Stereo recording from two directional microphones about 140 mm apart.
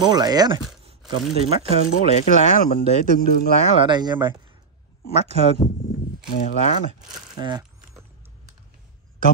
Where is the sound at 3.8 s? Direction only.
30° right (ahead or behind).